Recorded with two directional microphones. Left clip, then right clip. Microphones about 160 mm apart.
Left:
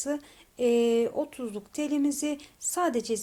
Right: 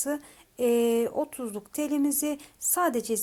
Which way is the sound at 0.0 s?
30° right (ahead or behind).